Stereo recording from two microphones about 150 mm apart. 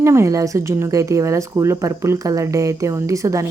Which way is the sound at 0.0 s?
20° right (ahead or behind).